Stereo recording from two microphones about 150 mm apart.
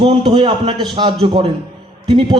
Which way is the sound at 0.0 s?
35° right (ahead or behind).